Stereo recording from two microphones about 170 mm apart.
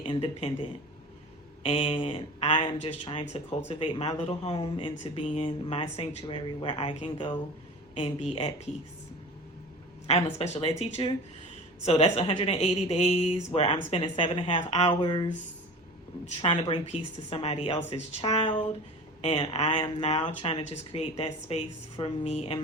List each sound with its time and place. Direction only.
0.0 s speech: 35° left (ahead or behind)
10.1 s speech: 40° left (ahead or behind)
15.0 s speech: 25° left (ahead or behind)